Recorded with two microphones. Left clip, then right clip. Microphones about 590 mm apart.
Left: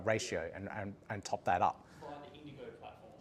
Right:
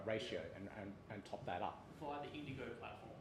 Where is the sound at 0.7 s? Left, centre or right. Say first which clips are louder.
Left 9 dB; left.